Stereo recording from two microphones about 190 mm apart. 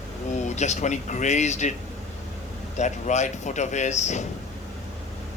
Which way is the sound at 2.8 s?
40° left (ahead or behind).